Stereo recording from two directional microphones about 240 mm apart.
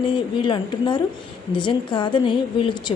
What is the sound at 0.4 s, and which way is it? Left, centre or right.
A woman's voice, centre.